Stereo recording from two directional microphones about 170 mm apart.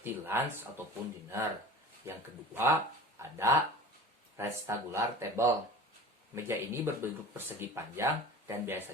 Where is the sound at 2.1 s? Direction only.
15° right (ahead or behind).